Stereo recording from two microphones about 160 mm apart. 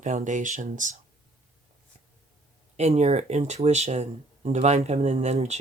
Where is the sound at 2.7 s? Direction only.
45° right (ahead or behind).